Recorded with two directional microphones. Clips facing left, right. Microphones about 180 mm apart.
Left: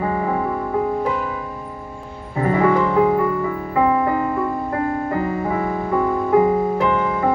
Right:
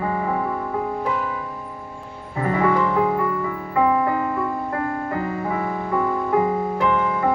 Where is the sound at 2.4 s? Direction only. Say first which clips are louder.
Left 3 dB; 25° left (ahead or behind).